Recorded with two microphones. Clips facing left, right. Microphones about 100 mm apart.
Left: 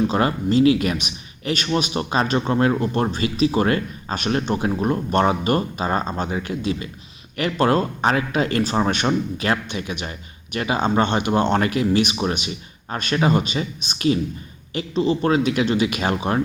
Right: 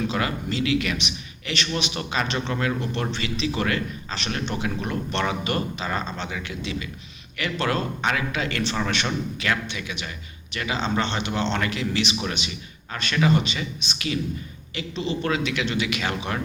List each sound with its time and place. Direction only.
0.1 s a man's voice: 40° left (ahead or behind)